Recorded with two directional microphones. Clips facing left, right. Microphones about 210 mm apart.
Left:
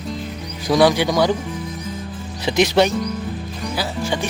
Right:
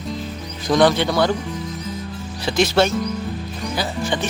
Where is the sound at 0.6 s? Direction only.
10° left (ahead or behind).